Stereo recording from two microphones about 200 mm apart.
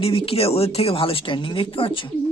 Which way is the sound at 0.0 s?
30° left (ahead or behind).